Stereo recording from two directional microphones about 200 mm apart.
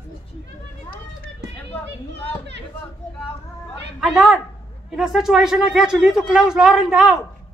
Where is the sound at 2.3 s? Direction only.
60° right (ahead or behind).